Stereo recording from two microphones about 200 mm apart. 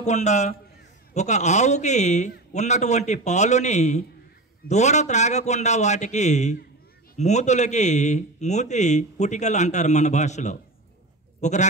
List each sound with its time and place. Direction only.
0.0 s speech: 35° left (ahead or behind)